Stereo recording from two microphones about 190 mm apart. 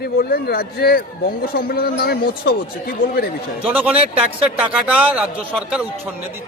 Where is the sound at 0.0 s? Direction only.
55° left (ahead or behind).